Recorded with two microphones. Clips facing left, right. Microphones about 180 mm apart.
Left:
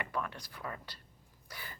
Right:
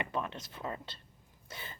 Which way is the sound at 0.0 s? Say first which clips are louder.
Right 2 dB; 20° right (ahead or behind).